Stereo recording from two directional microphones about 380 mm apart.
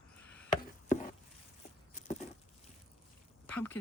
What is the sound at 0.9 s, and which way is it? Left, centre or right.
Chopping, centre.